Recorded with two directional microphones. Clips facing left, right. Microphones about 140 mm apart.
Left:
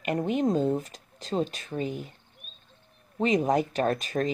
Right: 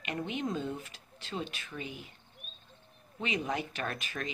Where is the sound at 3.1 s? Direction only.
40° left (ahead or behind).